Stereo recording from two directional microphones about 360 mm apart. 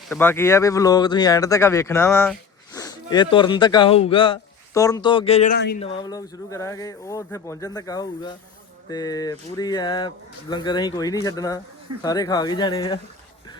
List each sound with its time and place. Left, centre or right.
0.1 s speech: centre; by 5.8 s left
5.8 s speech: centre